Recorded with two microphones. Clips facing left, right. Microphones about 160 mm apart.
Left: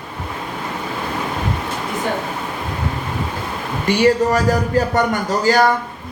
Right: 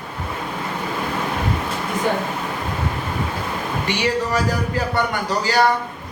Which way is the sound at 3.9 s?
45° left (ahead or behind).